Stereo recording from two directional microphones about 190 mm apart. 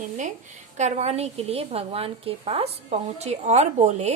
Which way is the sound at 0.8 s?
35° right (ahead or behind).